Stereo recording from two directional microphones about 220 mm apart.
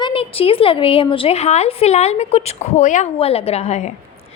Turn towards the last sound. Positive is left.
turn(degrees=30)  # may be behind; listen again after turning